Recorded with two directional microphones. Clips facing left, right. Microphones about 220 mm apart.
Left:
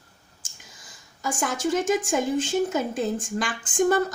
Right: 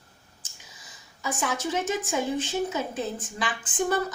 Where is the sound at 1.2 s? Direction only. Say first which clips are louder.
Left 3 dB; 45° left (ahead or behind).